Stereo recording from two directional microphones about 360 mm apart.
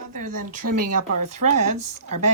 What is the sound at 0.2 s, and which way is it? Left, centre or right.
Speech, right.